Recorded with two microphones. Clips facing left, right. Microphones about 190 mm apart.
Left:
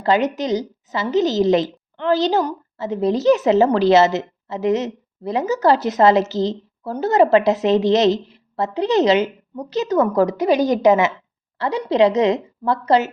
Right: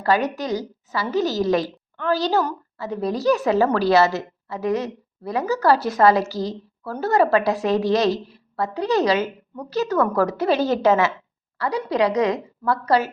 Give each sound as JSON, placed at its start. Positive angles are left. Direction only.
{"t": 0.0, "sound": "a woman's voice", "side_deg": 20}